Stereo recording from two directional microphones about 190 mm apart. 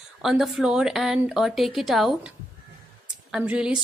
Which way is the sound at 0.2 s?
Centre (ahead or behind).